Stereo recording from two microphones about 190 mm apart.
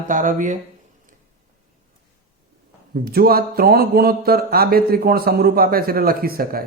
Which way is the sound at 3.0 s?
50° right (ahead or behind).